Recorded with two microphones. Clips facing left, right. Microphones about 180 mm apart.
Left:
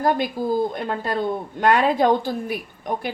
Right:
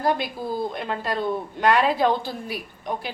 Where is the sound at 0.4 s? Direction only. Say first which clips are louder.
Left 5 dB; 40° left (ahead or behind).